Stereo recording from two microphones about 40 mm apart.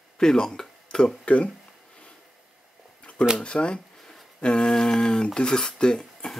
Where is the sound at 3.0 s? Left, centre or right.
Left.